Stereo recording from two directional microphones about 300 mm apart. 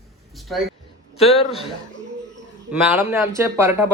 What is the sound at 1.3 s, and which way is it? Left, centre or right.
Speech, centre.